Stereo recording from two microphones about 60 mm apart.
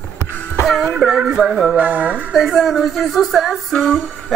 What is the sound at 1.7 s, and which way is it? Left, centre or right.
Music, right.